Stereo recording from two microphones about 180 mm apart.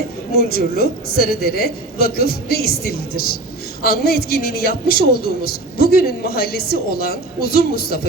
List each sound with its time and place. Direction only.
0.3 s a woman's voice: 60° left (ahead or behind)